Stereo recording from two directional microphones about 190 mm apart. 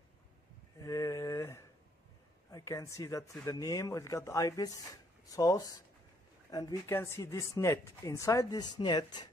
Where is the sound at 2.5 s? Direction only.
15° left (ahead or behind).